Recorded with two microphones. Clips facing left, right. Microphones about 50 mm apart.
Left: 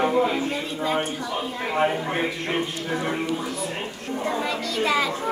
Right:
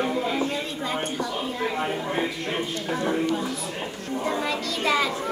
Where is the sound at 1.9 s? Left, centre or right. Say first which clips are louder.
Left 1 dB; left.